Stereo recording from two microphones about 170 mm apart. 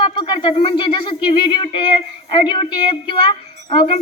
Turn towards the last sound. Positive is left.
turn(degrees=30)  # may be behind; listen again after turning